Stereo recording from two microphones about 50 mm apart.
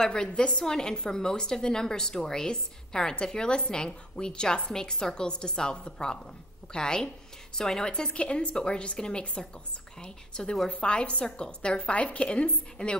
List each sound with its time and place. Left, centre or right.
0.0 s a woman's voice: centre